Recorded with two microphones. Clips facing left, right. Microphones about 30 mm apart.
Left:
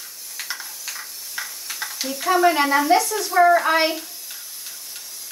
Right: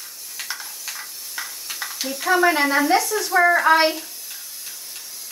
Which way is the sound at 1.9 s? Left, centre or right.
Centre.